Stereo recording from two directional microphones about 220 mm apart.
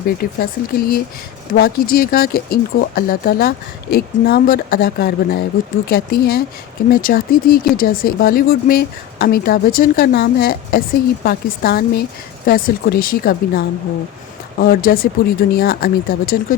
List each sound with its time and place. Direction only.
0.2 s speech: 45° left (ahead or behind)